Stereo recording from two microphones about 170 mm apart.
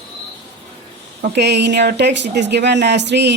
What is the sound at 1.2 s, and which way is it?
Speech, 90° right.